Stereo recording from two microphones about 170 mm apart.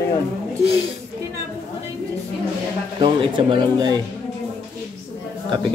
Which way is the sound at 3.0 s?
30° right (ahead or behind).